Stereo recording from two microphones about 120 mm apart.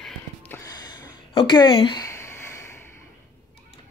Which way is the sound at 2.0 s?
25° left (ahead or behind).